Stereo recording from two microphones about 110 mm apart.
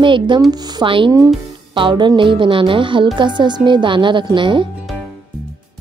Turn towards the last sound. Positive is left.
turn(degrees=-45)  # may be behind; listen again after turning